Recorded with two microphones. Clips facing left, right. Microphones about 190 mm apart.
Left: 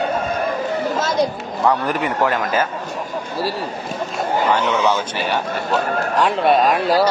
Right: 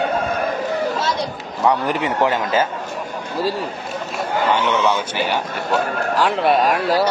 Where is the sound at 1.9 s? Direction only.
20° right (ahead or behind).